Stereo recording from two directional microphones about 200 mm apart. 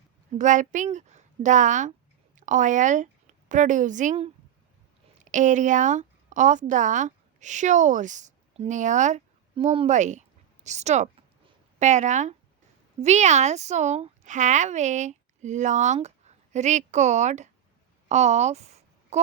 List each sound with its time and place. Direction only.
0.3 s a woman's voice: 40° right (ahead or behind)